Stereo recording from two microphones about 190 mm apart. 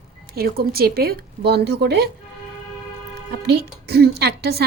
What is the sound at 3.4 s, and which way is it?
Speech, 55° right (ahead or behind).